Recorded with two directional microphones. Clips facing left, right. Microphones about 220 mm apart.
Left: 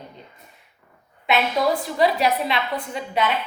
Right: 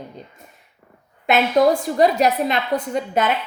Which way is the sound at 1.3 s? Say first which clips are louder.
Right 5 dB; 45° right (ahead or behind).